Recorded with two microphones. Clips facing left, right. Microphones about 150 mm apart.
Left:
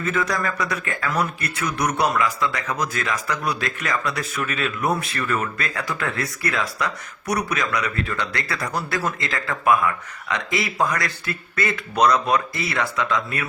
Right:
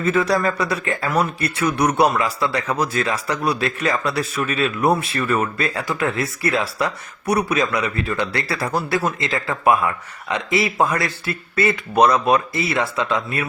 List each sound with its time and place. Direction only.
0.0 s a man's voice: 30° right (ahead or behind)